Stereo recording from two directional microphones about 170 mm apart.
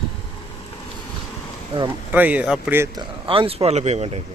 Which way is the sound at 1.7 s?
35° right (ahead or behind).